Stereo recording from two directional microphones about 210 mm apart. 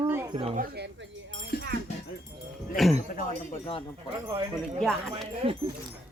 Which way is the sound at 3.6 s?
25° left (ahead or behind).